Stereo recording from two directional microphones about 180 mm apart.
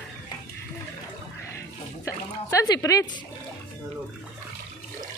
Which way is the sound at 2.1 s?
20° left (ahead or behind).